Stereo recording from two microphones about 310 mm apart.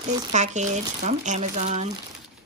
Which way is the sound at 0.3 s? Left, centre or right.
Right.